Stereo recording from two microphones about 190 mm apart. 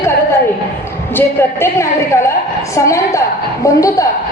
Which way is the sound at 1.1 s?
10° left (ahead or behind).